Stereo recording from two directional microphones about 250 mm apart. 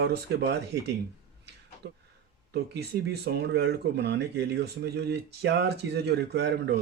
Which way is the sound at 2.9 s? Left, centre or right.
Right.